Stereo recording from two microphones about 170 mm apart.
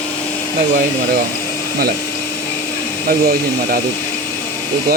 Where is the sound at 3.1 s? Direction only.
60° right (ahead or behind).